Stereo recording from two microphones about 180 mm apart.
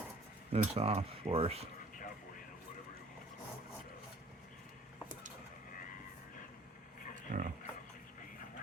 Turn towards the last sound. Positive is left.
turn(degrees=-50)  # may be behind; listen again after turning